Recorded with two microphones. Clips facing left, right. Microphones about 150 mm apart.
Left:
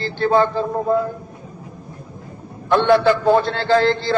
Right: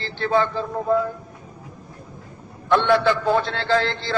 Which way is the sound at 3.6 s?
40° left (ahead or behind).